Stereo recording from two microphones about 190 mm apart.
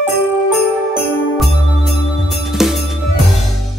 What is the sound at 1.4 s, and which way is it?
Music, centre (ahead or behind).